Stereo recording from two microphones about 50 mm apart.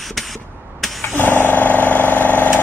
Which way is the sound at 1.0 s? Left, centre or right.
Left.